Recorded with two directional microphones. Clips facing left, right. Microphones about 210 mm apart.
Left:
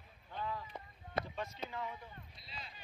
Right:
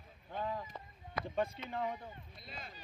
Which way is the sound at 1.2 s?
25° left (ahead or behind).